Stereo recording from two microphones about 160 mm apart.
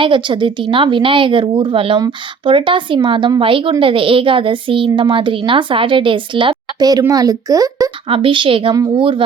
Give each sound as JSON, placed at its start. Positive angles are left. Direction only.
{"t": 0.0, "sound": "a child's voice", "side_deg": -30}
{"t": 8.1, "sound": "speech", "side_deg": -30}